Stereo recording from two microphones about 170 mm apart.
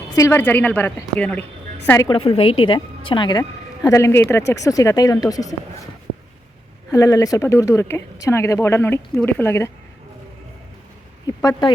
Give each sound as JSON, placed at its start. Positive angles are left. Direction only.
{"t": 0.2, "sound": "speech", "side_deg": 15}
{"t": 2.0, "sound": "speech", "side_deg": 35}
{"t": 6.9, "sound": "speech", "side_deg": 20}
{"t": 11.3, "sound": "speech", "side_deg": 20}